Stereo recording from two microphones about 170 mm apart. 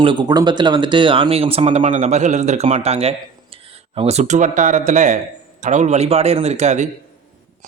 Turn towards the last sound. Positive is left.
turn(degrees=-40)  # may be behind; listen again after turning